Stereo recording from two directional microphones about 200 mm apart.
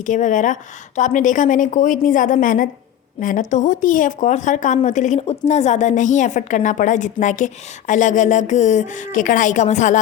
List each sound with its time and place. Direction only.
0.0 s a woman's voice: 40° left (ahead or behind)